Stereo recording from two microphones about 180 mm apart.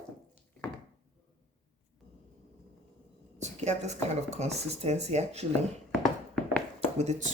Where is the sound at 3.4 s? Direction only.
40° right (ahead or behind).